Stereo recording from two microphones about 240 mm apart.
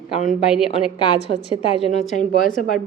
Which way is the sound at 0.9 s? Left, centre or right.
Left.